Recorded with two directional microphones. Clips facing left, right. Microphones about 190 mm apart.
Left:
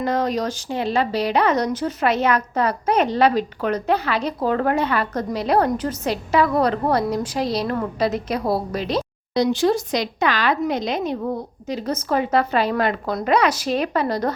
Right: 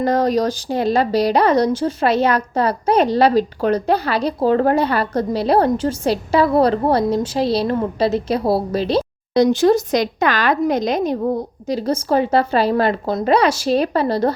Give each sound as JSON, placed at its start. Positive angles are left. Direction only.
{"t": 0.0, "sound": "a woman's voice", "side_deg": -40}
{"t": 9.3, "sound": "a woman's voice", "side_deg": -45}